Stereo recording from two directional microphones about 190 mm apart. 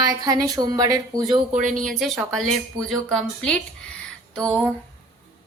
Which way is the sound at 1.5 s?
40° right (ahead or behind).